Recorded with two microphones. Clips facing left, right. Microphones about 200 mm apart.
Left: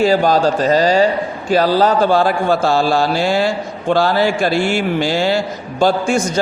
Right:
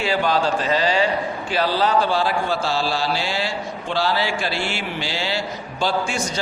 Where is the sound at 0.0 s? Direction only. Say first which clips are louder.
Left 8 dB; 40° left (ahead or behind).